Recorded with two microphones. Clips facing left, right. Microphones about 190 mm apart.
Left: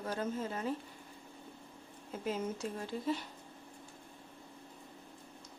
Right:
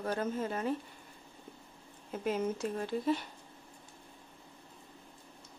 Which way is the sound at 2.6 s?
60° right (ahead or behind).